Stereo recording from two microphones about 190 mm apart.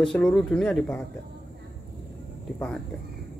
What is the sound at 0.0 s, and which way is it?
A man's voice, 5° left (ahead or behind).